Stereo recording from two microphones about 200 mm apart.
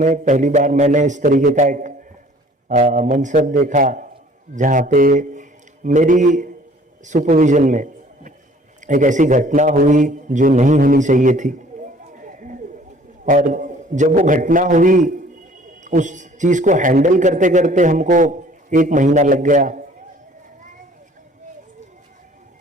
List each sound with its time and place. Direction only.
0.0 s a man's voice: 40° right (ahead or behind)
12.1 s a sound: 40° right (ahead or behind)
13.2 s a man's voice: 40° right (ahead or behind)